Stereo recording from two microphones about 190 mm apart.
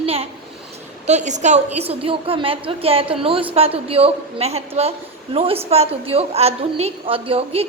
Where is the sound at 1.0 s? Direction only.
40° right (ahead or behind).